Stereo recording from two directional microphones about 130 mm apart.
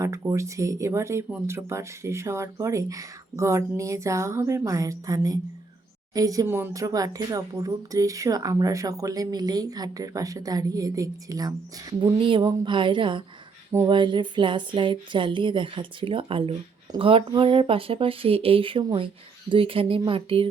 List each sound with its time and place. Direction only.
0.0 s a woman's voice: 25° right (ahead or behind); by 20.5 s 45° right (ahead or behind)